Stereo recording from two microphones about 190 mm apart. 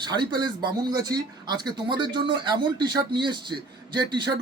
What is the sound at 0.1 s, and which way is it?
Speech, 25° right (ahead or behind).